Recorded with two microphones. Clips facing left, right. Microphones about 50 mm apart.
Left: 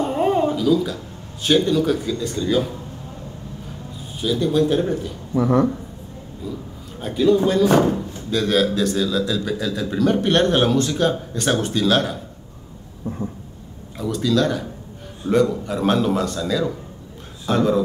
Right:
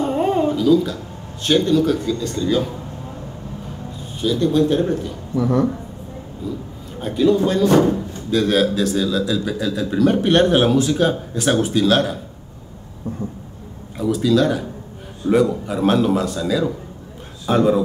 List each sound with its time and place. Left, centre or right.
0.0 s a sound: centre
1.4 s speech: centre
4.2 s speech: centre
5.3 s speech: left
7.0 s speech: centre
13.9 s a man's voice: centre